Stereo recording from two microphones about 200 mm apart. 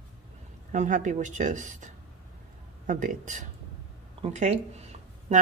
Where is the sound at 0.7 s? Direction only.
40° right (ahead or behind).